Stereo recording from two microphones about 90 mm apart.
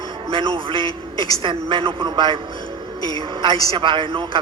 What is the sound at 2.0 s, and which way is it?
Speech, 60° right (ahead or behind).